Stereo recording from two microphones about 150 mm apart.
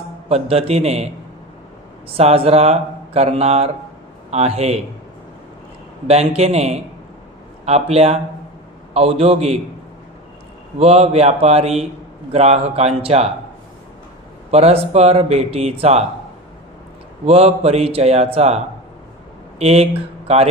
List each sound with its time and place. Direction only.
0.3 s a man's voice: 45° right (ahead or behind)
6.0 s a man's voice: 45° right (ahead or behind)
10.8 s a man's voice: 45° right (ahead or behind)
14.5 s a man's voice: 45° right (ahead or behind)
17.3 s a man's voice: 45° right (ahead or behind)
19.6 s a man's voice: 45° right (ahead or behind)